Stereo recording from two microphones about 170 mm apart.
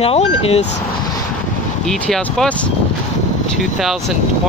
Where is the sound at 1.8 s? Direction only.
5° left (ahead or behind).